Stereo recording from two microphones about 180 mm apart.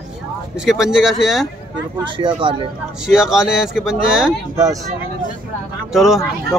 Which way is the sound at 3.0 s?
5° right (ahead or behind).